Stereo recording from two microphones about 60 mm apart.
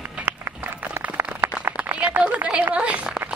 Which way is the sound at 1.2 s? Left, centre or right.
Right.